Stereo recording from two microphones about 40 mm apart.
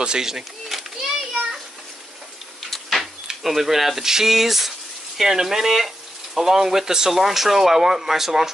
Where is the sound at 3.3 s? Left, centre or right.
Centre.